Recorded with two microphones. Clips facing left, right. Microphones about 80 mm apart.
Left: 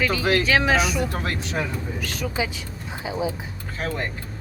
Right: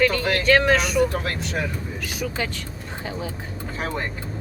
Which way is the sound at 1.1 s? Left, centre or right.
Left.